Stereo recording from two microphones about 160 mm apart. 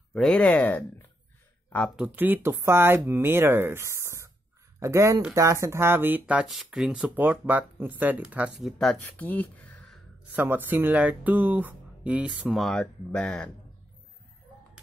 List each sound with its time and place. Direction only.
0.1 s speech: 5° left (ahead or behind)
2.0 s speech: 10° right (ahead or behind); by 9.9 s 10° left (ahead or behind)
10.3 s speech: 10° right (ahead or behind); by 13.5 s 5° left (ahead or behind)